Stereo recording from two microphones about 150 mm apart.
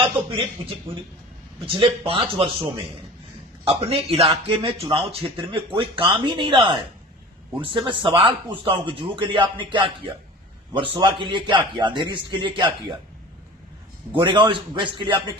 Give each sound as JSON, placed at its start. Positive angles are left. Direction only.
{"t": 0.0, "sound": "a sound", "side_deg": -35}
{"t": 0.9, "sound": "speech", "side_deg": -35}
{"t": 3.6, "sound": "speech", "side_deg": -40}
{"t": 14.1, "sound": "speech", "side_deg": -30}